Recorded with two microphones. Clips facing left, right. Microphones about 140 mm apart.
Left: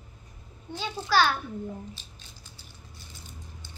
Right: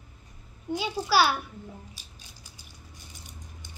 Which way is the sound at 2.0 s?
10° right (ahead or behind).